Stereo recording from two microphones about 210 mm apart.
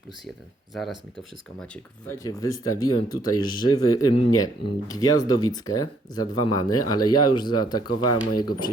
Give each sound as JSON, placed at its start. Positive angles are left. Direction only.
{"t": 0.7, "sound": "speech", "side_deg": 0}
{"t": 1.7, "sound": "speech", "side_deg": 15}